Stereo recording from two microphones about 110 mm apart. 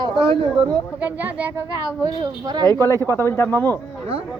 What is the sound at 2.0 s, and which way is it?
Speech, 40° right (ahead or behind).